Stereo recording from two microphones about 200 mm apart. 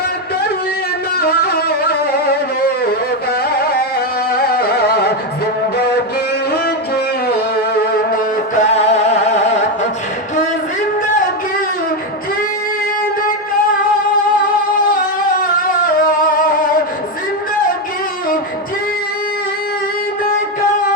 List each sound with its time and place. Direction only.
1.2 s music: 50° left (ahead or behind)
4.3 s carnatic music: 50° left (ahead or behind)
6.5 s music: 50° left (ahead or behind); by 9.4 s 35° left (ahead or behind)
14.8 s a sound: 45° left (ahead or behind)
16.0 s music: 45° left (ahead or behind)